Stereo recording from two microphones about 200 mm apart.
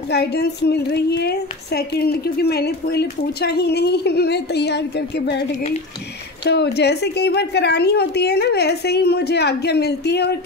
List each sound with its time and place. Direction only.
0.1 s a woman's voice: 55° left (ahead or behind)
6.4 s a woman's voice: 55° left (ahead or behind)